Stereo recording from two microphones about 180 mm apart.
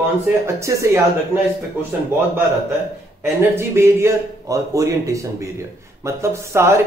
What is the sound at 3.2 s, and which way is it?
Speech, 15° right (ahead or behind).